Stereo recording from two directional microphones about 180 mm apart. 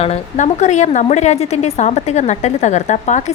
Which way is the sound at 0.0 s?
40° left (ahead or behind).